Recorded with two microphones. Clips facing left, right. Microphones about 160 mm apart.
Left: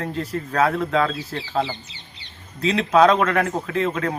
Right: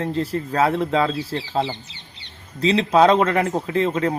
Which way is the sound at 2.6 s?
30° right (ahead or behind).